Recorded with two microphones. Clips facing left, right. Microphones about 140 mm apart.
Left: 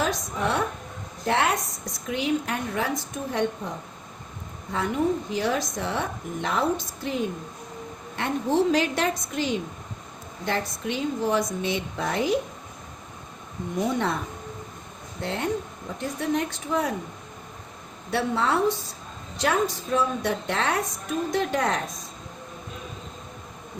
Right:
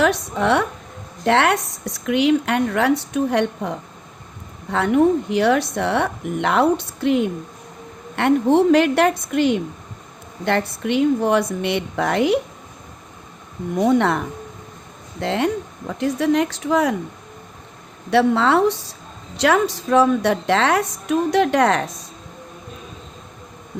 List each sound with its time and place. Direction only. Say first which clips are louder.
0.0 s speech: right 8 dB; 70° right (ahead or behind)
1.2 s speech: right 7 dB; 80° right
13.7 s speech: right 9 dB; 65° right (ahead or behind)
15.2 s a woman's voice: right 7 dB; 90° right
18.1 s a woman's voice: right 9 dB; 80° right